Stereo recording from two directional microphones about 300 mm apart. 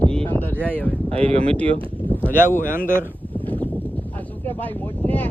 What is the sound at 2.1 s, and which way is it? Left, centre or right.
Speech, centre.